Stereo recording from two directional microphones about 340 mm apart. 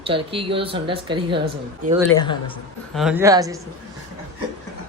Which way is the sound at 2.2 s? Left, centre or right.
Centre.